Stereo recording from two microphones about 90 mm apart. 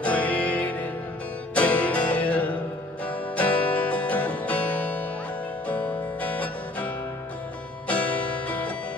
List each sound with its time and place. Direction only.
0.0 s music: 15° left (ahead or behind)
7.9 s music: 15° left (ahead or behind)